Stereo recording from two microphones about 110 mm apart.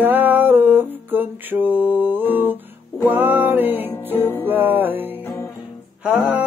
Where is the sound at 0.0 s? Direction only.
15° right (ahead or behind).